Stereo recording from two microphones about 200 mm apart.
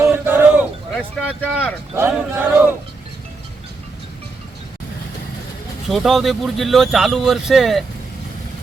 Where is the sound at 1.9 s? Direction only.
10° right (ahead or behind).